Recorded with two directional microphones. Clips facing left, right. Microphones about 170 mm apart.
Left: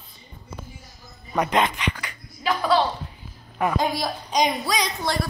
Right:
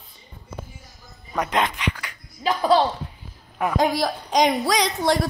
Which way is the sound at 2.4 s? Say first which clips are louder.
Right 2 dB; 35° right (ahead or behind).